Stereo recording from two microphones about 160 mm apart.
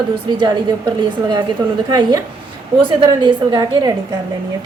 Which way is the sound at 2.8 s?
30° right (ahead or behind).